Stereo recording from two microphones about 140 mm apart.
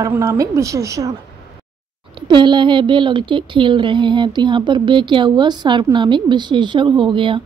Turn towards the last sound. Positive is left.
turn(degrees=-35)  # may be behind; listen again after turning